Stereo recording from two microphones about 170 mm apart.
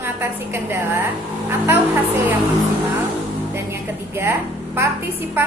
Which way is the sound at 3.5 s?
15° right (ahead or behind).